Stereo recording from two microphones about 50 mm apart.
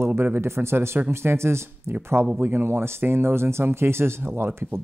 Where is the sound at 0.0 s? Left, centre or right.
Right.